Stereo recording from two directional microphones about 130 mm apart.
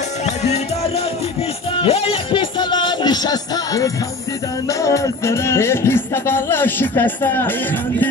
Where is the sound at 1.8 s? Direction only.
45° left (ahead or behind).